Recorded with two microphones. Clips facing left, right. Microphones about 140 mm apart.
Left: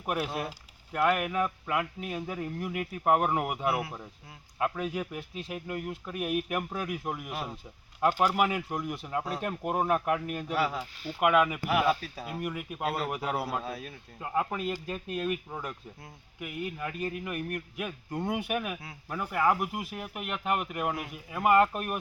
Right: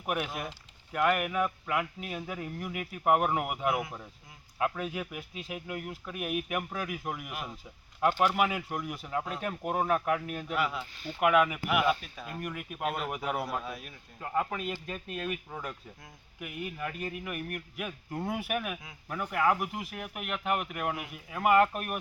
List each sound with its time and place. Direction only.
0.9 s speech: centre (ahead or behind)
10.5 s speech: 35° left (ahead or behind)
11.0 s speech: 5° left (ahead or behind)
11.9 s speech: 35° left (ahead or behind)
12.4 s speech: 5° left (ahead or behind)
12.8 s speech: 35° left (ahead or behind)
13.1 s speech: centre (ahead or behind)
13.5 s speech: 30° left (ahead or behind)
14.2 s speech: 5° left (ahead or behind)